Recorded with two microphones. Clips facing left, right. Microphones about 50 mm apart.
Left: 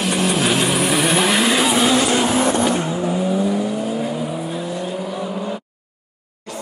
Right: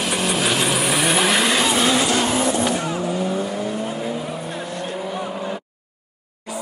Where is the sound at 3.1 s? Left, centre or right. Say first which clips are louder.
Left 4 dB; centre.